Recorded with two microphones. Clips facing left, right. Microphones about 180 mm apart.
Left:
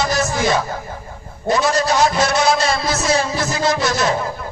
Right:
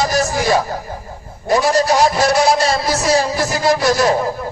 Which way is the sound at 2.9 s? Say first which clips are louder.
Right 3 dB; 35° right (ahead or behind).